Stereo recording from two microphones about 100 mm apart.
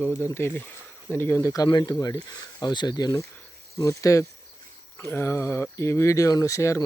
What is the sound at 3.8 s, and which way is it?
Speech, 30° left (ahead or behind).